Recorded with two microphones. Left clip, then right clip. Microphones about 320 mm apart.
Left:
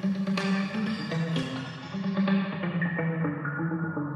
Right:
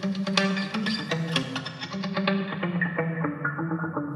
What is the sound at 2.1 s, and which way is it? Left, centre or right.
Music, right.